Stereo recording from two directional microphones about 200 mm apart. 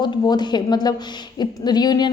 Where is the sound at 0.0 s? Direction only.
20° left (ahead or behind).